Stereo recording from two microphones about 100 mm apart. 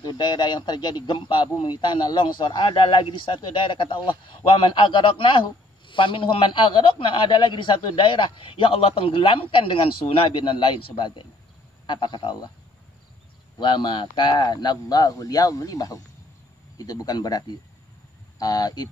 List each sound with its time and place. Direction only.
0.0 s a man's voice: 45° left (ahead or behind)
13.6 s a man's voice: 50° left (ahead or behind)